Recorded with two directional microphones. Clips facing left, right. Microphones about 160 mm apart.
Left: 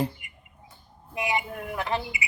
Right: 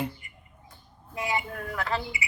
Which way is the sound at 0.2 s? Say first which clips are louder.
Left 1 dB; 15° left (ahead or behind).